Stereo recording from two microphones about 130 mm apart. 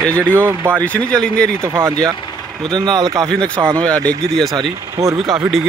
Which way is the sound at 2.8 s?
35° right (ahead or behind).